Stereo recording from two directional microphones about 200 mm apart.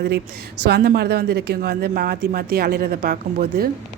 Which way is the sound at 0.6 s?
55° right (ahead or behind).